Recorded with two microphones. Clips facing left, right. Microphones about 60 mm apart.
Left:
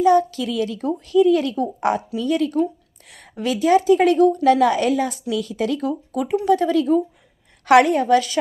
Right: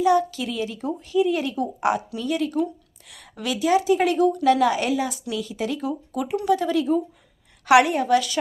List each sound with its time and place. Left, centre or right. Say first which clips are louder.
0.0 s a woman's voice: left 4 dB; left
0.4 s speech: left 5 dB; left
1.5 s a woman's voice: left 2 dB; left